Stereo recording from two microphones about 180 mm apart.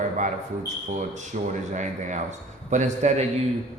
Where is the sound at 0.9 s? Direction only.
40° right (ahead or behind).